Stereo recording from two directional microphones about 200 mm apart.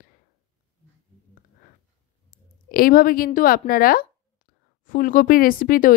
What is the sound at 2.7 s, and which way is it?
Speech, 45° left (ahead or behind).